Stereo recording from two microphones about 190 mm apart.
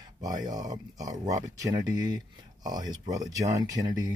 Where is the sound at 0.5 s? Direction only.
20° right (ahead or behind).